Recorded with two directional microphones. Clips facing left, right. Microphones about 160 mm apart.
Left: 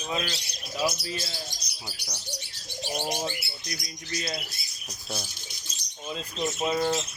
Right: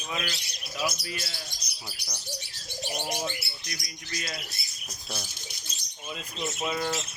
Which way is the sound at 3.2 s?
30° left (ahead or behind).